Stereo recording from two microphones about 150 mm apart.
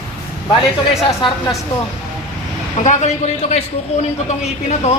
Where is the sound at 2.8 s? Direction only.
50° left (ahead or behind).